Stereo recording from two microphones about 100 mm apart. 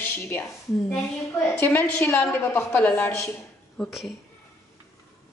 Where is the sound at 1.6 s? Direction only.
20° left (ahead or behind).